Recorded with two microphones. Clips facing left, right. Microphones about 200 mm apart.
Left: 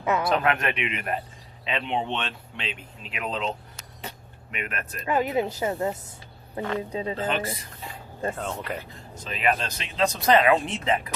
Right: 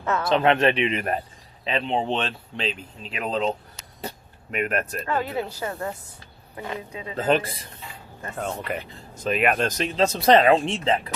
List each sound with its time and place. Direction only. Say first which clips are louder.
0.0 s speech: left 1 dB; 15° left (ahead or behind)
0.3 s speech: right 5 dB; 25° right (ahead or behind)
4.5 s speech: right 9 dB; 40° right (ahead or behind)
4.9 s speech: left 2 dB; 15° left (ahead or behind)
6.6 s speech: left 5 dB; 35° left (ahead or behind)
7.2 s speech: right 5 dB; 40° right (ahead or behind)
8.4 s speech: right 3 dB; 15° right (ahead or behind)
9.2 s speech: right 4 dB; 55° right (ahead or behind)
10.0 s speech: right 3 dB; 30° right (ahead or behind)